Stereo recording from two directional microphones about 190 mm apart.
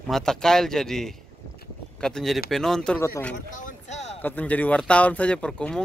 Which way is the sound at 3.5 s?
40° left (ahead or behind).